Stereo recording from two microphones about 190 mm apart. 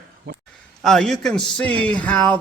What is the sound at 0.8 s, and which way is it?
A man's voice, centre (ahead or behind).